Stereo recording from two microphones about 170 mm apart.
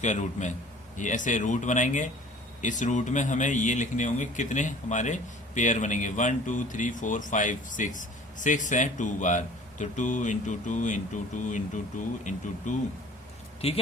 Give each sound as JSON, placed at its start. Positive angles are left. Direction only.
{"t": 0.0, "sound": "speech", "side_deg": 45}